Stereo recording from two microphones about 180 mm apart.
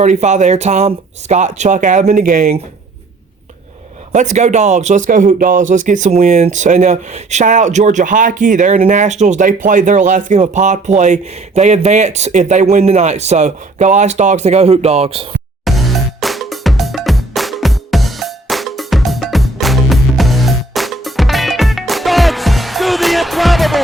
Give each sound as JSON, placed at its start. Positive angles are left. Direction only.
{"t": 0.0, "sound": "speech", "side_deg": -40}
{"t": 4.1, "sound": "speech", "side_deg": -40}
{"t": 15.6, "sound": "music", "side_deg": 0}